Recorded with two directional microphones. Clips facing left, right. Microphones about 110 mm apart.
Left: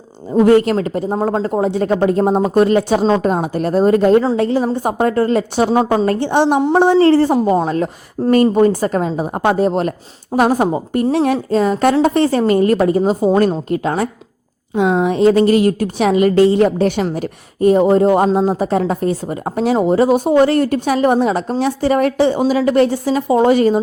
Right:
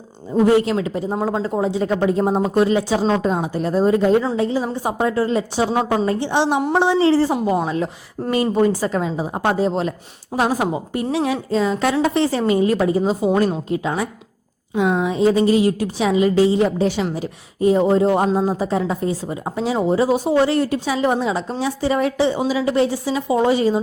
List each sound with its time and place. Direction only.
0.3 s a woman's voice: 60° left (ahead or behind)
5.7 s a woman's voice: 40° left (ahead or behind)
6.1 s a woman's voice: 55° left (ahead or behind)